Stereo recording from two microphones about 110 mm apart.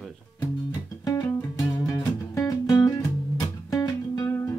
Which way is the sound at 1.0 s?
35° left (ahead or behind).